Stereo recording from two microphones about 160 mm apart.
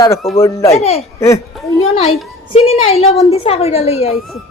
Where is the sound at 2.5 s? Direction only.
40° left (ahead or behind).